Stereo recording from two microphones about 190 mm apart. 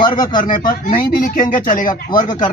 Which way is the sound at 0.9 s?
50° left (ahead or behind).